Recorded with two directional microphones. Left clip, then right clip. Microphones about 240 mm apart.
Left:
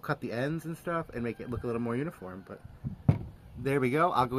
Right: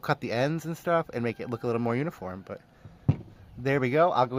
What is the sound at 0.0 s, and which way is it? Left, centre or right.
Speech, right.